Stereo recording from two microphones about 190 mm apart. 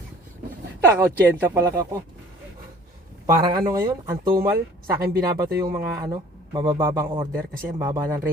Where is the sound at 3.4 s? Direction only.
20° right (ahead or behind).